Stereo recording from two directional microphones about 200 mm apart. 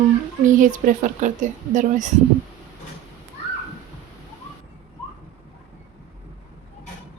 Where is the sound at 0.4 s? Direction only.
40° right (ahead or behind).